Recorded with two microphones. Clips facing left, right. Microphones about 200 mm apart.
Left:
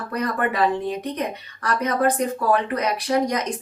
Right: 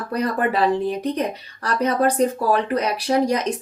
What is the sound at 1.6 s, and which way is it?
Speech, 30° right (ahead or behind).